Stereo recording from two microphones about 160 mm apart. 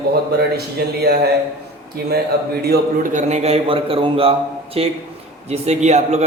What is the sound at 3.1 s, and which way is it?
A man's voice, 45° right (ahead or behind).